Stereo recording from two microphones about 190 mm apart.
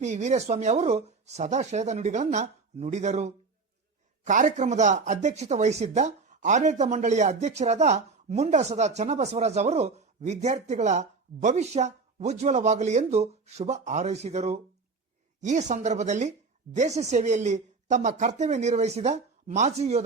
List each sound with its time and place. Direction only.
0.0 s speech: 35° right (ahead or behind)